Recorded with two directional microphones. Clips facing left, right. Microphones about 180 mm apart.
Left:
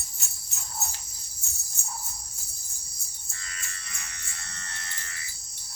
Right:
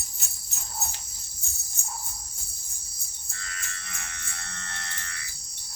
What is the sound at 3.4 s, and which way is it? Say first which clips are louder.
Music: right 3 dB; 60° right (ahead or behind).